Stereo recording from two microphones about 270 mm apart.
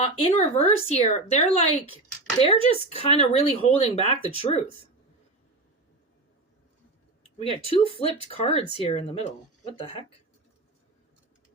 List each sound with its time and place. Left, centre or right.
0.0 s speech: centre
7.3 s speech: left